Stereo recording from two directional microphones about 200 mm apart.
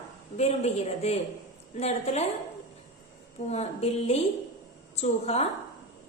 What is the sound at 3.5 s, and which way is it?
A woman's voice, 30° left (ahead or behind).